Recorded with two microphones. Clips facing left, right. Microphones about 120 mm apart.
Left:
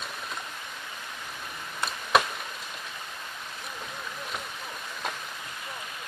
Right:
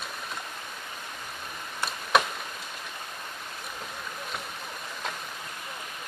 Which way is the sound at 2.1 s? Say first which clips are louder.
Even; centre (ahead or behind).